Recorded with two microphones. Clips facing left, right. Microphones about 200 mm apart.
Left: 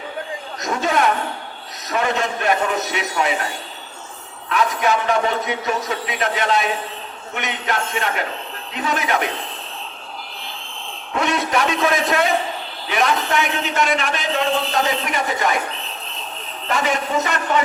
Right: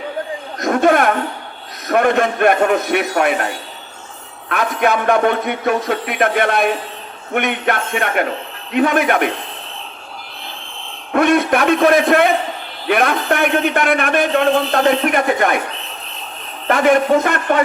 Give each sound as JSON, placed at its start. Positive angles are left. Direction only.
{"t": 0.6, "sound": "a man's voice", "side_deg": -55}
{"t": 11.1, "sound": "a man's voice", "side_deg": -55}
{"t": 16.6, "sound": "speech", "side_deg": -55}